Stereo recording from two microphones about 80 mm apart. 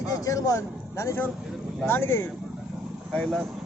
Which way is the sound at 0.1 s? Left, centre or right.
Left.